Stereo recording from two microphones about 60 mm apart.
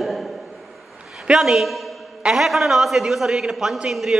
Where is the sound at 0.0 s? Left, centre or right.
Centre.